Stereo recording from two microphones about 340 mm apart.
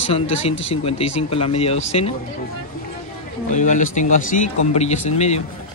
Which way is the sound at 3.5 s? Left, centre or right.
Left.